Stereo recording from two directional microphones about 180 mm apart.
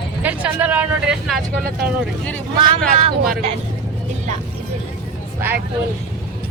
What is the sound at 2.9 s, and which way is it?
Speech, 30° right (ahead or behind).